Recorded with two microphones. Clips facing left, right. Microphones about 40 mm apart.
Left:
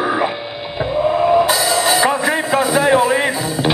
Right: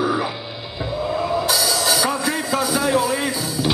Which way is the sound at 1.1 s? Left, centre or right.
Left.